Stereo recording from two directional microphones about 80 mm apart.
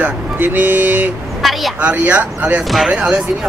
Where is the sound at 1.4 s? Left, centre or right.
Centre.